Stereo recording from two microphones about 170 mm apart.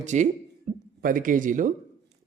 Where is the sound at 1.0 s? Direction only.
55° right (ahead or behind).